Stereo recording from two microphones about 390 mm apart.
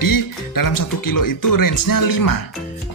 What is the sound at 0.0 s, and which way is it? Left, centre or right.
Speech, left.